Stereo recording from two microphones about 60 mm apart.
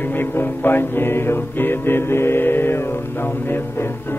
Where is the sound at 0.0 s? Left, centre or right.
Left.